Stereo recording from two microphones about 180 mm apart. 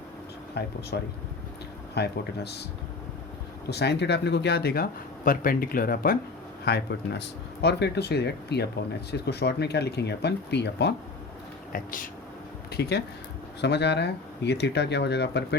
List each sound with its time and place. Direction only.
0.6 s speech: 65° left (ahead or behind)
3.7 s speech: 65° left (ahead or behind)
6.7 s speech: 70° left (ahead or behind)
11.7 s speech: 50° left (ahead or behind)
12.7 s speech: 65° left (ahead or behind)